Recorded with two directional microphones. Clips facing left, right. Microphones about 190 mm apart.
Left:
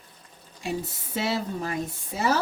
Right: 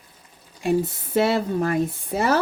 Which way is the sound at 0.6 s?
55° right (ahead or behind).